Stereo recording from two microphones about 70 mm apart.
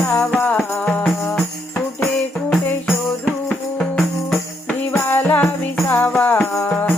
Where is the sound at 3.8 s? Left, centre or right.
Centre.